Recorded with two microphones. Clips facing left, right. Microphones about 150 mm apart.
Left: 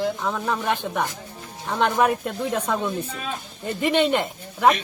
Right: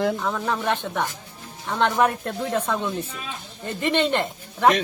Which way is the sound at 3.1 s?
45° left (ahead or behind).